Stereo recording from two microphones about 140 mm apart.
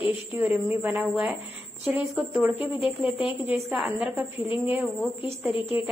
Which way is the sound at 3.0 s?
40° left (ahead or behind).